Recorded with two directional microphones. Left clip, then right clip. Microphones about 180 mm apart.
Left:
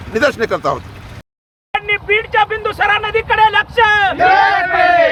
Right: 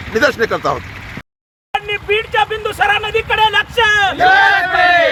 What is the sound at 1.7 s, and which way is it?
Speech, 25° right (ahead or behind).